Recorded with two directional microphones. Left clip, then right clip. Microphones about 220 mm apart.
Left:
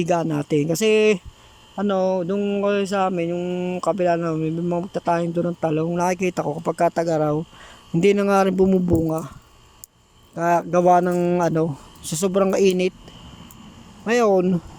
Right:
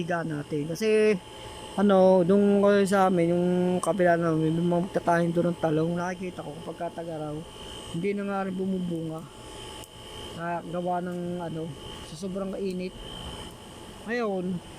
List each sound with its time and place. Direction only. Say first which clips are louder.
0.0 s speech: left 9 dB; 20° left (ahead or behind)
1.7 s mantra: right 1 dB; centre (ahead or behind)
6.0 s speech: left 11 dB; 20° left (ahead or behind)
10.3 s speech: left 14 dB; 30° left (ahead or behind)
14.1 s speech: left 12 dB; 25° left (ahead or behind)